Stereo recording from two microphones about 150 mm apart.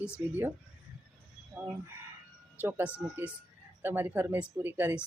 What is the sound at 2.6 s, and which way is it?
Speech, 15° right (ahead or behind).